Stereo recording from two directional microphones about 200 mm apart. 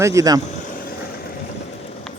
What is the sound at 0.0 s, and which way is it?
Speech, 15° right (ahead or behind).